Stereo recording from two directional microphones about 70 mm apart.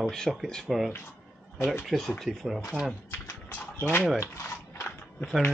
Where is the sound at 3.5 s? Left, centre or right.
Left.